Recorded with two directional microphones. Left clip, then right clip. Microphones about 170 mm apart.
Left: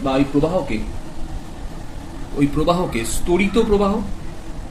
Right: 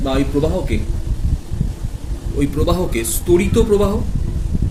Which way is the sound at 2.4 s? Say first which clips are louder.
Left 1 dB; 50° right (ahead or behind).